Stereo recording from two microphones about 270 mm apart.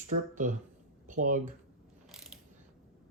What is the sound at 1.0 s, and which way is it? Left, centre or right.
Speech, right.